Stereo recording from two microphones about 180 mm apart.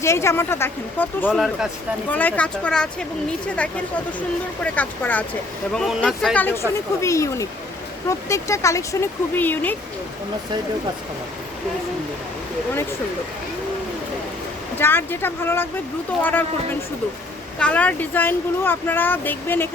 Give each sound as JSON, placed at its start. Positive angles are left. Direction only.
{"t": 0.0, "sound": "speech", "side_deg": 15}
{"t": 4.6, "sound": "speech", "side_deg": 10}
{"t": 6.3, "sound": "speech", "side_deg": 10}
{"t": 14.8, "sound": "speech", "side_deg": 10}
{"t": 17.6, "sound": "speech", "side_deg": 5}